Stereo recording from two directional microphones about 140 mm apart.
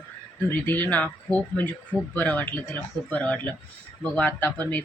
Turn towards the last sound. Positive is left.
turn(degrees=10)  # may be behind; listen again after turning